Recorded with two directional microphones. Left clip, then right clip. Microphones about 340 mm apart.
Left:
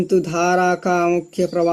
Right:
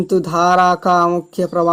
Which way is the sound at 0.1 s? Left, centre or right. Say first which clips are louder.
Right 5 dB; right.